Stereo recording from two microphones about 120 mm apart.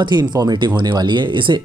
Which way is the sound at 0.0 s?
35° right (ahead or behind).